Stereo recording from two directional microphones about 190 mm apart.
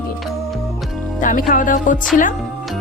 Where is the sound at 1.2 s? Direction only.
45° left (ahead or behind).